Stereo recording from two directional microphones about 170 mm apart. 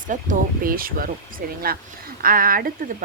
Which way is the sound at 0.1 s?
55° right (ahead or behind).